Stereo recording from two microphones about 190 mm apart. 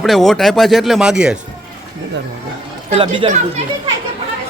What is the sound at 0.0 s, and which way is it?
Speech, centre (ahead or behind).